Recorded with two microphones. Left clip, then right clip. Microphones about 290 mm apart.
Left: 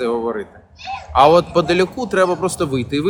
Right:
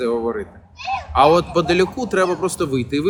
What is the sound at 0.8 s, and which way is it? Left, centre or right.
Speech, right.